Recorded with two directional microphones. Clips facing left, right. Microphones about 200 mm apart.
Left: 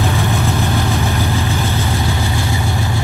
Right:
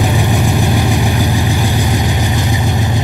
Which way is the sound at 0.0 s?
15° right (ahead or behind).